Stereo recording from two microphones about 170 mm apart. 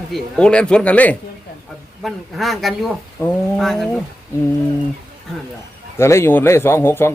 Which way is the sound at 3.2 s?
15° left (ahead or behind).